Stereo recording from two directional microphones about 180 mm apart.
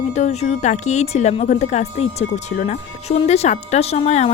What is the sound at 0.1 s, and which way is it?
Speech, 40° left (ahead or behind).